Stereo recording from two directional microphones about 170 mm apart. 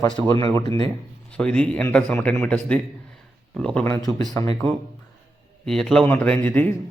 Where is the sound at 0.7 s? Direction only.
30° right (ahead or behind).